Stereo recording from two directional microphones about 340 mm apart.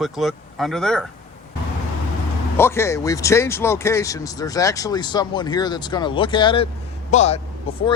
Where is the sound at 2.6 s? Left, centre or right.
Centre.